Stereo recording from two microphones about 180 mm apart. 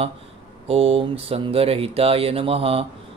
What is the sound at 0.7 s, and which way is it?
Speech, 35° right (ahead or behind).